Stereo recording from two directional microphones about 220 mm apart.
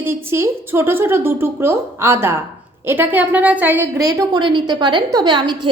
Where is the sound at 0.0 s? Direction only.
10° right (ahead or behind).